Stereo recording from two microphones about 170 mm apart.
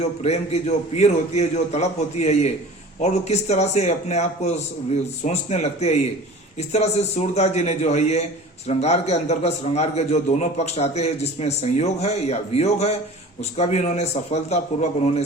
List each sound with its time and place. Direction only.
0.0 s a man's voice: 40° left (ahead or behind)